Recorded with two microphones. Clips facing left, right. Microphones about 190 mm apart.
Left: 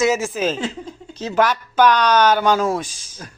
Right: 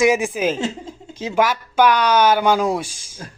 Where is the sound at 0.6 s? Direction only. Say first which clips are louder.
Right 1 dB; 25° right (ahead or behind).